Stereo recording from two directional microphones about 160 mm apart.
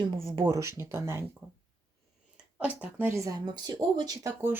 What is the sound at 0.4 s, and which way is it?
Speech, 20° right (ahead or behind).